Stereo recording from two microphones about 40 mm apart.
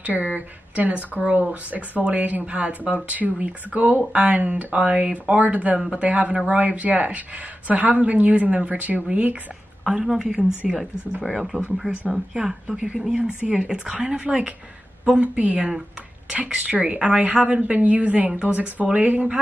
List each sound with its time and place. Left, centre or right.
0.0 s speech: right
9.8 s speech: centre
15.1 s speech: right